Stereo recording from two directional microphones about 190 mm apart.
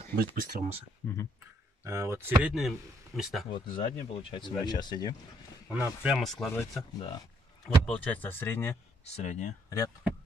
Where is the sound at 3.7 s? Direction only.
25° left (ahead or behind).